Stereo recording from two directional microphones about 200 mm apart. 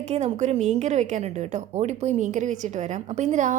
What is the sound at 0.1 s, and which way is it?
A woman's voice, 30° right (ahead or behind).